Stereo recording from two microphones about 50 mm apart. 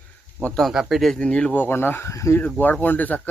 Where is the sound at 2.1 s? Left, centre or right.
Left.